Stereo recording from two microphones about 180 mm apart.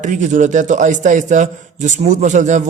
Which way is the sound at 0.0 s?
45° right (ahead or behind).